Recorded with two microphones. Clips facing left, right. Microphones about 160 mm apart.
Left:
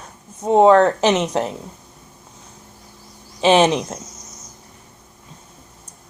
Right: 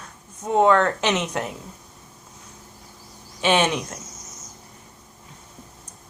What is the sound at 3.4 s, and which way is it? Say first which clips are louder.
Speech: left 6 dB; 30° left (ahead or behind).